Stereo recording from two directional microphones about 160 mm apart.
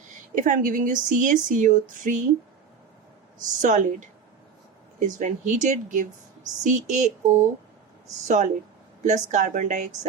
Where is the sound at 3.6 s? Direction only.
50° right (ahead or behind).